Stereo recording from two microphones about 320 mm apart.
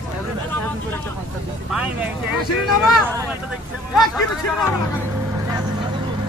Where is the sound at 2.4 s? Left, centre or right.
Centre.